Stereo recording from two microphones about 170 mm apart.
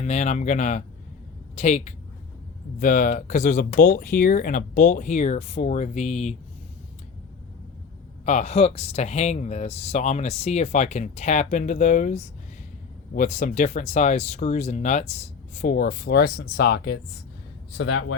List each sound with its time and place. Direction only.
0.0 s speech: 45° left (ahead or behind)
8.2 s speech: 45° left (ahead or behind); by 17.0 s 75° left (ahead or behind)
17.7 s speech: 90° left